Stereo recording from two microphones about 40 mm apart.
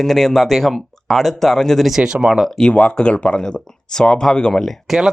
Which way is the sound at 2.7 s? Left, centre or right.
Left.